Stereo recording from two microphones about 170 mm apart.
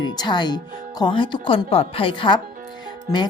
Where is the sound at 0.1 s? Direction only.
25° left (ahead or behind).